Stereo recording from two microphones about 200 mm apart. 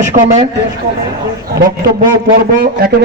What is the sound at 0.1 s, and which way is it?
Speech, 35° right (ahead or behind).